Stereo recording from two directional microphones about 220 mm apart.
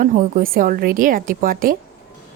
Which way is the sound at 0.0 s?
40° right (ahead or behind).